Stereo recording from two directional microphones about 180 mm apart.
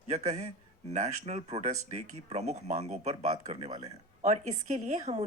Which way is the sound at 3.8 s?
40° right (ahead or behind).